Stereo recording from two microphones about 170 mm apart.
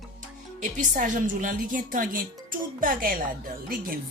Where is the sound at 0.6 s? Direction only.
45° right (ahead or behind).